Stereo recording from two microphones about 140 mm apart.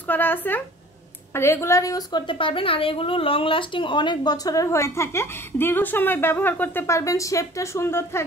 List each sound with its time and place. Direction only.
0.1 s a woman's voice: 15° left (ahead or behind)